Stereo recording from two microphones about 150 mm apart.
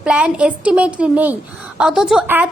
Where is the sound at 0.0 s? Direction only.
5° right (ahead or behind).